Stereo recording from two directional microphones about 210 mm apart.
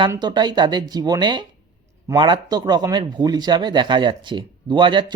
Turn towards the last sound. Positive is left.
turn(degrees=-20)  # may be behind; listen again after turning